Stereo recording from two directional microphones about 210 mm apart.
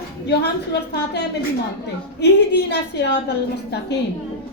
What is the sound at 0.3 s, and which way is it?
Speech, 50° left (ahead or behind).